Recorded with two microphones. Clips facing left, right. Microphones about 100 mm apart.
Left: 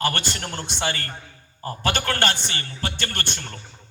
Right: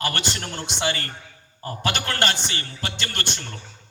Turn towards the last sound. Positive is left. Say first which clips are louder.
# even
turn(degrees=50)  # may be behind; listen again after turning